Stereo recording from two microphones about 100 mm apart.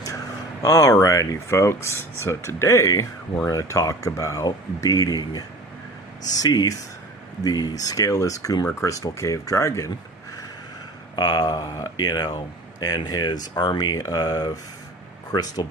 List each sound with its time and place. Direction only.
0.6 s speech: 30° left (ahead or behind)
11.2 s speech: 40° left (ahead or behind)